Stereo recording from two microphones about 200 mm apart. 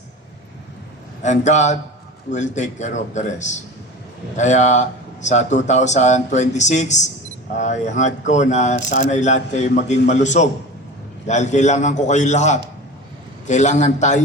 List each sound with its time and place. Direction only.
1.2 s speech: 35° left (ahead or behind)